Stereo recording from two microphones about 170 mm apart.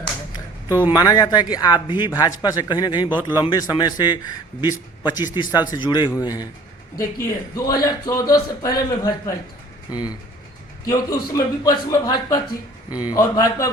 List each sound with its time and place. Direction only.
0.9 s speech: 20° left (ahead or behind)